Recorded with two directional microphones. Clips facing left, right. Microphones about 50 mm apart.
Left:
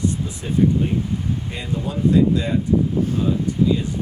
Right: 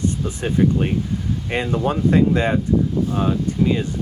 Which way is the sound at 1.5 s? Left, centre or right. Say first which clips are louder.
Right 6 dB; right.